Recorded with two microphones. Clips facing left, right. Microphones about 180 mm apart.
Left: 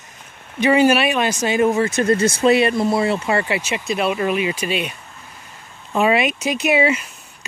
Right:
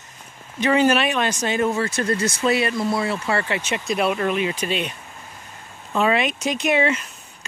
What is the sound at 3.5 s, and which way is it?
Speech, 5° left (ahead or behind).